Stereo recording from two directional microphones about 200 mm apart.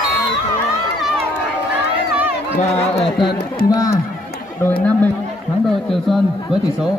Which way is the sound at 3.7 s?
20° left (ahead or behind).